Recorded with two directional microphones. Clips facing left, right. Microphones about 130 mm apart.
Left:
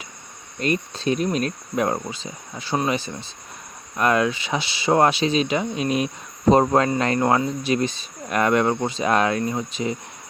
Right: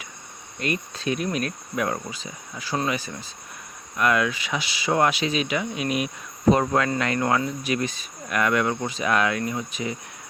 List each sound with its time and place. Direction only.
0.6 s speech: 30° left (ahead or behind)